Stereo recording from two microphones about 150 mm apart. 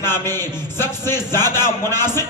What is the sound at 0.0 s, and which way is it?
A man's voice, 15° left (ahead or behind).